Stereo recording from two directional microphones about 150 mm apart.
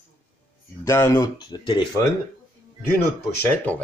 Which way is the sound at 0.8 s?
20° left (ahead or behind).